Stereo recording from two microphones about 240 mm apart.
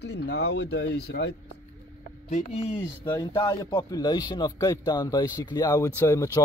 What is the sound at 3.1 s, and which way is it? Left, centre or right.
A man's voice, centre.